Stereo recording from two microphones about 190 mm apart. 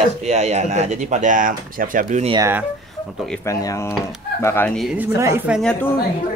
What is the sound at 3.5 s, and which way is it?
Speech, 15° left (ahead or behind).